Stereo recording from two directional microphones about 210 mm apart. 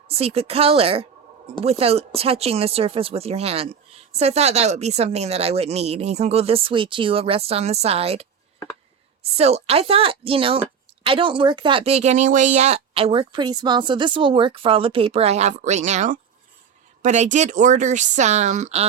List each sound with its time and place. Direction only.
0.1 s speech: 30° right (ahead or behind)
9.4 s speech: 30° right (ahead or behind)